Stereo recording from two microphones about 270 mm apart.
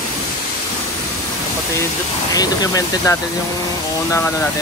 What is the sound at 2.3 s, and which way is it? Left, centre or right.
Speech, centre.